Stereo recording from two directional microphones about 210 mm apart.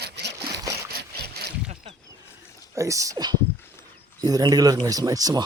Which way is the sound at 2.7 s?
15° right (ahead or behind).